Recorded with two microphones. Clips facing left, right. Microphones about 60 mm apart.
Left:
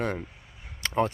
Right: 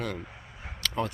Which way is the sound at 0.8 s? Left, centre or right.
Left.